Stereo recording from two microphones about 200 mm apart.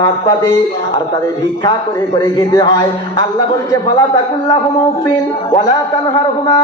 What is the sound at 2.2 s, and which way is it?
Music, 20° left (ahead or behind).